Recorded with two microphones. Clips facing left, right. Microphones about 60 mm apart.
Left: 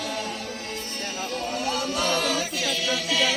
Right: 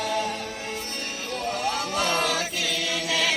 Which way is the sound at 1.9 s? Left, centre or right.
Right.